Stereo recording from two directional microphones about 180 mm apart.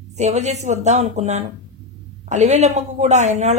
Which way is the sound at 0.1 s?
40° right (ahead or behind).